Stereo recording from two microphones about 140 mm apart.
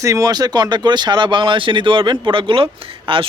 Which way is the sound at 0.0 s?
25° right (ahead or behind).